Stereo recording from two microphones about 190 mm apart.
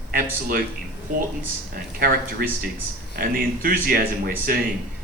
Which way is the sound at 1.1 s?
45° right (ahead or behind).